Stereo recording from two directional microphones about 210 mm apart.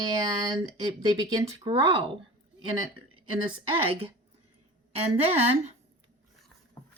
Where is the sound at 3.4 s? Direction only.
25° right (ahead or behind).